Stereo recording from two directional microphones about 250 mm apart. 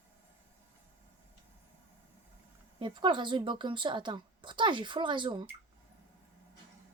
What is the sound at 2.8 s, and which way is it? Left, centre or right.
A woman's voice, centre.